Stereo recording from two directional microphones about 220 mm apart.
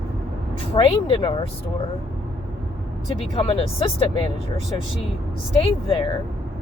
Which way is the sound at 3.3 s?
25° left (ahead or behind).